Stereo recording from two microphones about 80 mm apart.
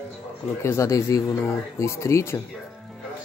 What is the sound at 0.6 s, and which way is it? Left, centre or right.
Speech, left.